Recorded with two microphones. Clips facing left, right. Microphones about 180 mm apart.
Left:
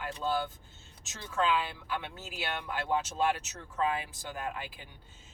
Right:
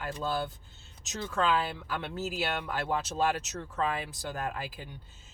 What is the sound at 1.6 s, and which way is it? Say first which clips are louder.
Speech: right 2 dB; 40° right (ahead or behind).